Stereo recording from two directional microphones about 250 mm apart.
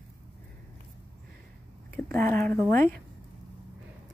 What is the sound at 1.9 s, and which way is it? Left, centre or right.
Speech, centre.